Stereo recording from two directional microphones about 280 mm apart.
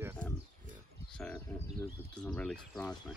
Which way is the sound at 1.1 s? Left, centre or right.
Centre.